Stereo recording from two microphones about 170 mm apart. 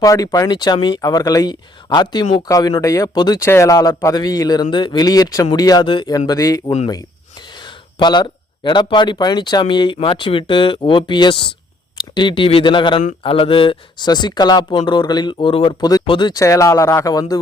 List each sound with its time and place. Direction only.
0.0 s speech: 20° left (ahead or behind)